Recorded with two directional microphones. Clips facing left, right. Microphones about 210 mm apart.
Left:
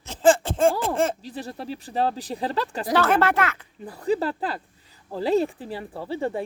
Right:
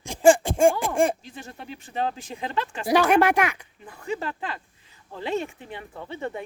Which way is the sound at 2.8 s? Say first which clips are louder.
Right 2 dB; 15° right (ahead or behind).